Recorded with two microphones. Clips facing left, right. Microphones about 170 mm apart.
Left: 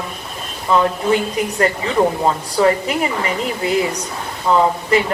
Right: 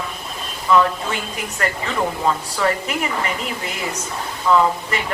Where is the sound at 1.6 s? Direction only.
35° left (ahead or behind).